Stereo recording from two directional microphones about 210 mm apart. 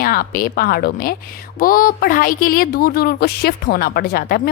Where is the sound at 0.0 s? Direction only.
45° left (ahead or behind).